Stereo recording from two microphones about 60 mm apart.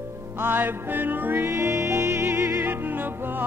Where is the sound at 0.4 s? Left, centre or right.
Right.